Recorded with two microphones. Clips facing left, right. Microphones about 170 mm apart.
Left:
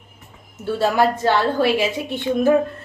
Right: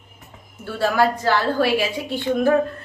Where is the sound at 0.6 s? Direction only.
25° left (ahead or behind).